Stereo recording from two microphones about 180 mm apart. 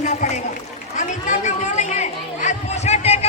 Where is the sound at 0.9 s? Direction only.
45° left (ahead or behind).